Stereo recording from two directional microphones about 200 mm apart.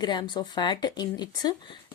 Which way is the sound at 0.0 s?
20° left (ahead or behind).